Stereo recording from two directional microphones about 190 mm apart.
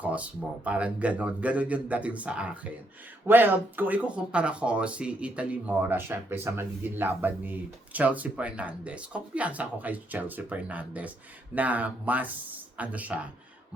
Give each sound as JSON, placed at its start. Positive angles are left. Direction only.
{"t": 0.0, "sound": "speech", "side_deg": -5}